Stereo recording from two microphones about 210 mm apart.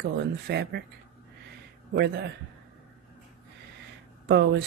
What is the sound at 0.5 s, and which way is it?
Speech, 55° right (ahead or behind).